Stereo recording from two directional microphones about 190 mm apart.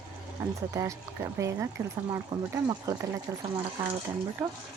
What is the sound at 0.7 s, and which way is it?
Speech, 15° right (ahead or behind).